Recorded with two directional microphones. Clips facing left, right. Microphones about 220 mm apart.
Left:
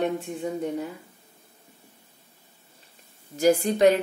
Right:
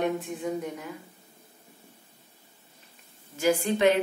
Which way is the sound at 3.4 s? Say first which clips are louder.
Left 4 dB; 40° left (ahead or behind).